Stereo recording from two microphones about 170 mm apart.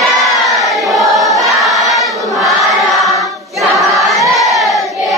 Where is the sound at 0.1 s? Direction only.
Centre (ahead or behind).